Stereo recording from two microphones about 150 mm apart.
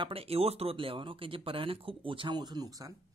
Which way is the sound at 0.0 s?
40° right (ahead or behind).